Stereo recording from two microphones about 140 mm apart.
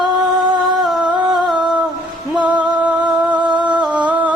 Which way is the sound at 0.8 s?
Centre (ahead or behind).